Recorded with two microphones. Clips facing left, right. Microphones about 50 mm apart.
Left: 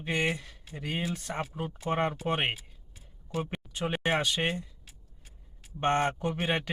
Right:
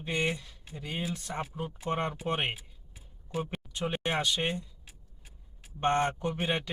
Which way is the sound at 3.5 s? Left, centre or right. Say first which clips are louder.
Left 1 dB; centre.